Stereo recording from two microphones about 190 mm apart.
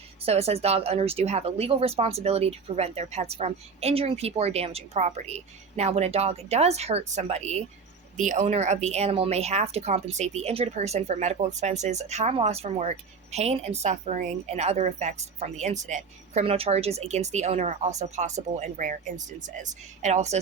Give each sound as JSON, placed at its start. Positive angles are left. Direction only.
{"t": 0.3, "sound": "speech", "side_deg": -35}